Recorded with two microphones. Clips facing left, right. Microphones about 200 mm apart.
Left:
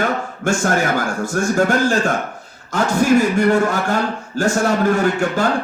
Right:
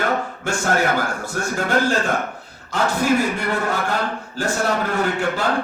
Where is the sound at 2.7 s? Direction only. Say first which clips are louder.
Left 4 dB; 45° left (ahead or behind).